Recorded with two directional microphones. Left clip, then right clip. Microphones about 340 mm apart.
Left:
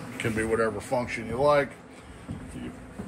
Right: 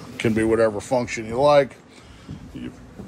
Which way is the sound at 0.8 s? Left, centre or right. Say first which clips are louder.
Right 6 dB; centre.